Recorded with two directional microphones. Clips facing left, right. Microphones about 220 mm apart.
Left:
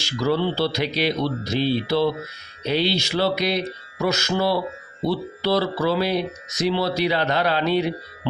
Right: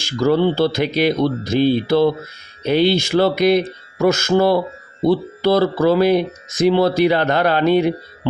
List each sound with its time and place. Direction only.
0.0 s speech: 50° right (ahead or behind)